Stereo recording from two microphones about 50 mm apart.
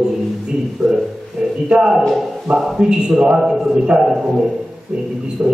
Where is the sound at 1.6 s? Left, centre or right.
Centre.